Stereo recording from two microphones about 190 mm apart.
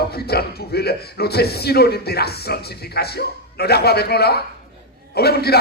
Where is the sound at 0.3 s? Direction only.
55° left (ahead or behind).